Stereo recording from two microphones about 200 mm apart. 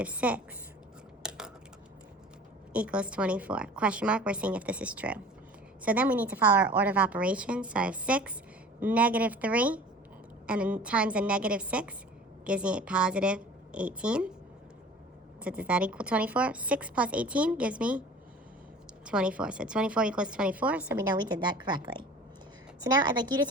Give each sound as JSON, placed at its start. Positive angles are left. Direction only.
{"t": 0.0, "sound": "speech", "side_deg": -5}
{"t": 1.2, "sound": "a sound", "side_deg": -5}
{"t": 2.7, "sound": "a woman's voice", "side_deg": -5}
{"t": 15.4, "sound": "speech", "side_deg": -5}
{"t": 19.0, "sound": "a woman's voice", "side_deg": -5}